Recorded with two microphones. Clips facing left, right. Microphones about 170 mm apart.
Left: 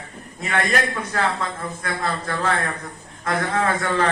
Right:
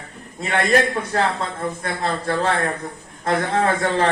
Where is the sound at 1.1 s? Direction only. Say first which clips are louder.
Right 2 dB; 30° right (ahead or behind).